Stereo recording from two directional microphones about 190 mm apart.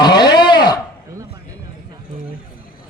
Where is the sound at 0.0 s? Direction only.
20° left (ahead or behind).